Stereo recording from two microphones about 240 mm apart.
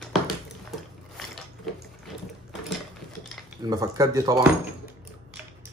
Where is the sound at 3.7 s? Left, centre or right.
Centre.